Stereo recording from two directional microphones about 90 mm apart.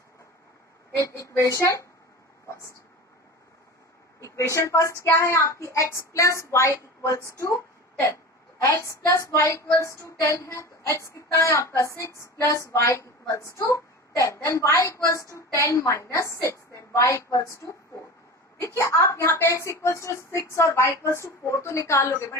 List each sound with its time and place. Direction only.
0.9 s a woman's voice: 35° left (ahead or behind)
2.5 s a sound: 35° left (ahead or behind)
4.2 s a woman's voice: 35° left (ahead or behind)
18.8 s a woman's voice: 35° left (ahead or behind)